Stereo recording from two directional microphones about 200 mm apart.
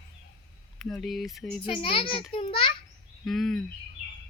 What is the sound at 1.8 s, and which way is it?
Speech, 25° left (ahead or behind).